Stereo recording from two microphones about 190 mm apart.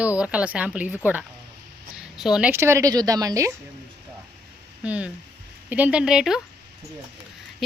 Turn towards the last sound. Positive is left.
turn(degrees=0)  # may be behind; listen again after turning